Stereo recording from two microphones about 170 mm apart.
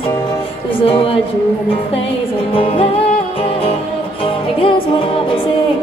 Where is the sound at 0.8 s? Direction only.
30° left (ahead or behind).